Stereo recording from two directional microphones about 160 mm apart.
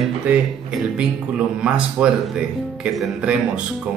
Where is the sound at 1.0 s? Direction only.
5° right (ahead or behind).